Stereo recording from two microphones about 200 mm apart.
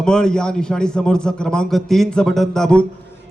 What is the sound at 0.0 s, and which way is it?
A man's voice, 5° left (ahead or behind).